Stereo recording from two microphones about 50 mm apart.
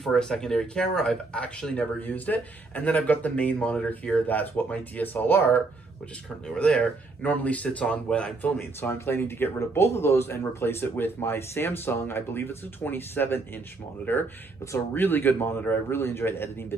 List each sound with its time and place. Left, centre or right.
0.0 s speech: centre; by 5.6 s left
6.4 s speech: centre
8.4 s speech: left
8.9 s speech: left